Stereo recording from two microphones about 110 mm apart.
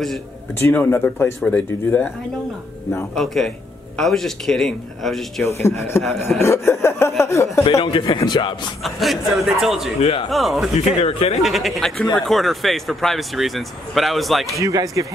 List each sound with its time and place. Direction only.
0.7 s speech: 15° left (ahead or behind)
3.2 s speech: 5° left (ahead or behind)
5.5 s speech: 25° left (ahead or behind)
7.8 s speech: 50° left (ahead or behind)
8.8 s speech: centre (ahead or behind)
9.9 s speech: 65° left (ahead or behind)
10.3 s speech: centre (ahead or behind)
11.0 s speech: 65° left (ahead or behind)
11.4 s speech: centre (ahead or behind)
14.6 s speech: 30° right (ahead or behind)